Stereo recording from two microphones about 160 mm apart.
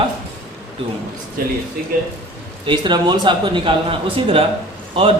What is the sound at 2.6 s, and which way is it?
A man's voice, 30° right (ahead or behind).